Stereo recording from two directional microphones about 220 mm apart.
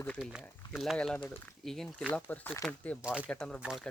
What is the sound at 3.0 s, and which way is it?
Speech, 5° right (ahead or behind).